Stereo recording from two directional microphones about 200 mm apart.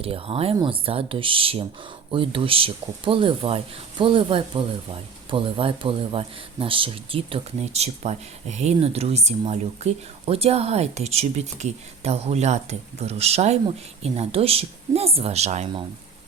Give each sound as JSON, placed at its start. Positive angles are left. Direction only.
{"t": 0.0, "sound": "speech", "side_deg": -30}